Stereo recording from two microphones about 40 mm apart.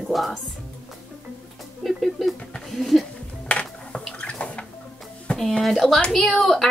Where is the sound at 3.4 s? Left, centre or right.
Left.